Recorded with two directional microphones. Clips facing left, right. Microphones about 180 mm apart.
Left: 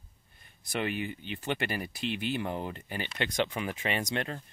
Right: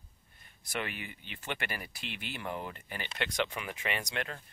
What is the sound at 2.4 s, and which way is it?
Speech, 25° left (ahead or behind).